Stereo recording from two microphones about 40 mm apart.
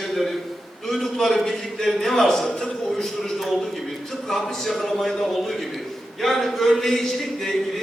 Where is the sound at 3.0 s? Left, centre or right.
Centre.